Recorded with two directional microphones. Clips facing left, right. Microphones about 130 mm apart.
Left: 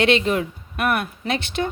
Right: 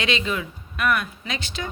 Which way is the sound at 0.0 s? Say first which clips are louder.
Left 7 dB; 60° left (ahead or behind).